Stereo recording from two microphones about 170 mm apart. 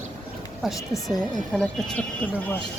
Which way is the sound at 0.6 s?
Centre (ahead or behind).